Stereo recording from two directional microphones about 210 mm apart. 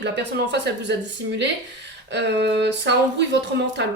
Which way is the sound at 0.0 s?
55° right (ahead or behind).